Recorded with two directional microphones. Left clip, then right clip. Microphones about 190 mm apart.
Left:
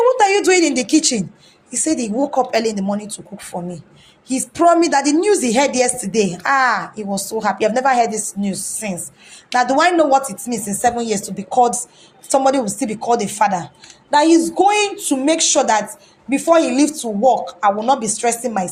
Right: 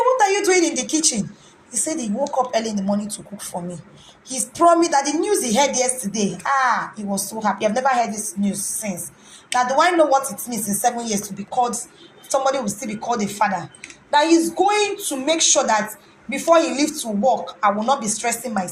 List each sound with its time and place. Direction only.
0.0 s a sound: 45° left (ahead or behind)
0.8 s a woman's voice: 45° left (ahead or behind)
9.6 s a woman's voice: 45° left (ahead or behind)